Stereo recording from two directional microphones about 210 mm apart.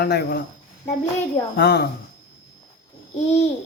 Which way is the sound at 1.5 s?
50° left (ahead or behind).